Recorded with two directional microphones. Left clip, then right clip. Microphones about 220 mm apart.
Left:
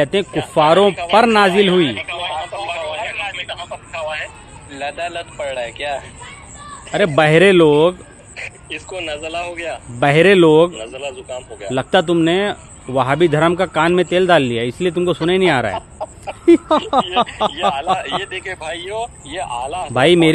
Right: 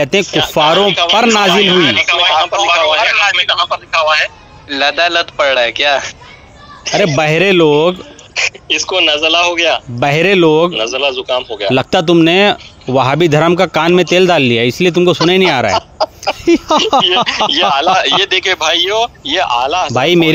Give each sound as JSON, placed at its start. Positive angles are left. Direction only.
{"t": 0.0, "sound": "a man's voice", "side_deg": -30}
{"t": 0.7, "sound": "speech", "side_deg": -55}
{"t": 1.1, "sound": "speech", "side_deg": -30}
{"t": 1.5, "sound": "speech", "side_deg": -55}
{"t": 7.2, "sound": "a man's voice", "side_deg": -40}
{"t": 10.7, "sound": "a man's voice", "side_deg": -50}
{"t": 19.9, "sound": "a man's voice", "side_deg": -40}